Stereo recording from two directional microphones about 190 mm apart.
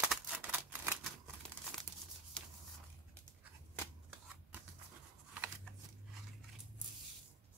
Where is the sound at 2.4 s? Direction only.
5° left (ahead or behind).